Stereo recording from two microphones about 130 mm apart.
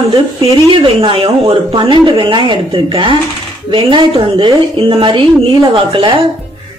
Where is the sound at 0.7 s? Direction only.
45° right (ahead or behind).